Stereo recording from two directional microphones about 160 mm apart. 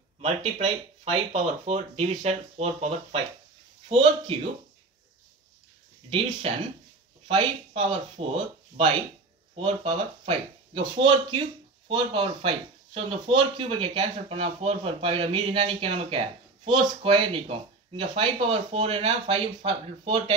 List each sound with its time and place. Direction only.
0.2 s speech: 35° right (ahead or behind)
6.0 s speech: 35° right (ahead or behind)